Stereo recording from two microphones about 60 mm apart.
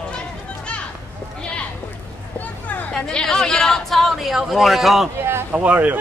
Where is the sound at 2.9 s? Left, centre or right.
Centre.